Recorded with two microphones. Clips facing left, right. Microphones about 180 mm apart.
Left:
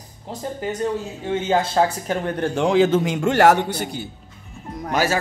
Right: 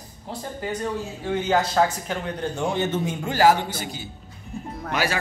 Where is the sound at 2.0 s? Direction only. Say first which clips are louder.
Left 5 dB; 50° left (ahead or behind).